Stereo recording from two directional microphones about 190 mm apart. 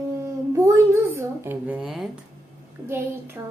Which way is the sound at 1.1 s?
10° right (ahead or behind).